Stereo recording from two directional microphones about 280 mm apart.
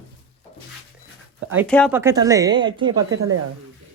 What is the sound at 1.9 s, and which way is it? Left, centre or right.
Speech, centre.